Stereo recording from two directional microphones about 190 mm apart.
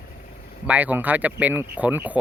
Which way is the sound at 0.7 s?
10° right (ahead or behind).